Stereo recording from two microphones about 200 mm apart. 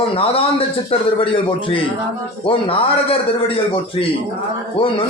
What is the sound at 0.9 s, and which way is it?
A man's voice, 25° left (ahead or behind).